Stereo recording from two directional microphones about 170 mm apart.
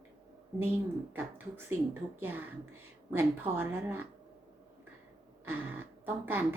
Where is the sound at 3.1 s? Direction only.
10° right (ahead or behind).